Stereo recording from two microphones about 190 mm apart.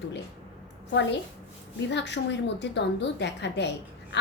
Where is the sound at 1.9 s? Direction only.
65° left (ahead or behind).